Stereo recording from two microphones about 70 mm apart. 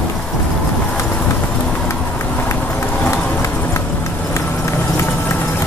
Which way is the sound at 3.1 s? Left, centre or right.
Left.